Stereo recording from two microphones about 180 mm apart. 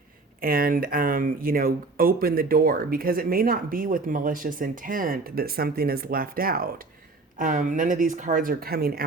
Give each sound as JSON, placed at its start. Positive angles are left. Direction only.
{"t": 0.4, "sound": "speech", "side_deg": -50}